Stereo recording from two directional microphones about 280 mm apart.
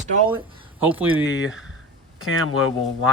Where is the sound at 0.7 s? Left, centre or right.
Centre.